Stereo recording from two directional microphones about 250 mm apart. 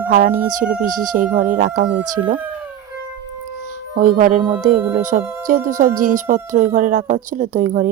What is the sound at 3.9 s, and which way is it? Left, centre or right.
Speech, right.